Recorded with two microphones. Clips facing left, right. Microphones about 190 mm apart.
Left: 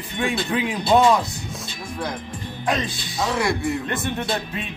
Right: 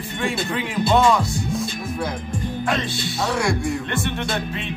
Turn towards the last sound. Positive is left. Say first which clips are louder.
# even
turn(degrees=0)  # may be behind; listen again after turning